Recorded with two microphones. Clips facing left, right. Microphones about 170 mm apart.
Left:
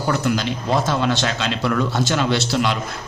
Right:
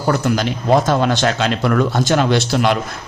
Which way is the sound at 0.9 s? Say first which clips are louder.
Right 4 dB; 50° right (ahead or behind).